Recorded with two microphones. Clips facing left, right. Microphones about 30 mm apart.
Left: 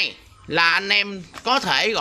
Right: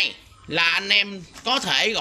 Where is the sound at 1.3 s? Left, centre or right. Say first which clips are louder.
Left 2 dB; left.